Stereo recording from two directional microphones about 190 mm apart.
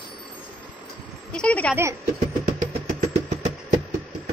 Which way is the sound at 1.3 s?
5° left (ahead or behind).